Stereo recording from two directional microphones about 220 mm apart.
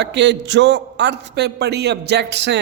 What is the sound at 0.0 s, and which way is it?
A man's voice, 55° right (ahead or behind).